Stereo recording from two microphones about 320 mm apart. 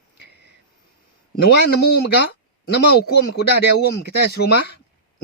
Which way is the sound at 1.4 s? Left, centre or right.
Left.